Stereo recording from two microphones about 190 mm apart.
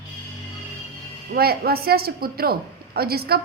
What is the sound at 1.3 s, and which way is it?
A woman's voice, 55° right (ahead or behind).